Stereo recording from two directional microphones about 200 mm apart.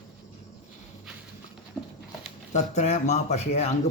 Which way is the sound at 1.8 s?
10° left (ahead or behind).